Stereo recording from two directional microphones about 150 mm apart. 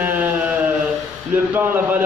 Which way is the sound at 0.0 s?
10° right (ahead or behind).